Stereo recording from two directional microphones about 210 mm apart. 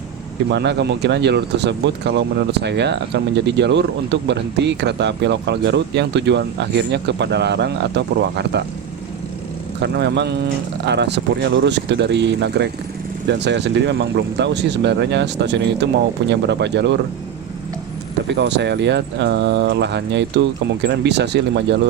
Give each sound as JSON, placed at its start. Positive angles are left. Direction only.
{"t": 0.5, "sound": "speech", "side_deg": -55}
{"t": 9.8, "sound": "speech", "side_deg": -55}
{"t": 18.3, "sound": "speech", "side_deg": -55}